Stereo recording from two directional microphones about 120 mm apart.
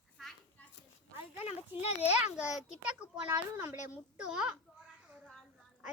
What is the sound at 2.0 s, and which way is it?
Speech, 65° left (ahead or behind).